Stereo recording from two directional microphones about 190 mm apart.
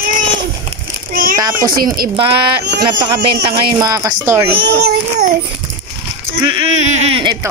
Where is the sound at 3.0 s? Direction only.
25° right (ahead or behind).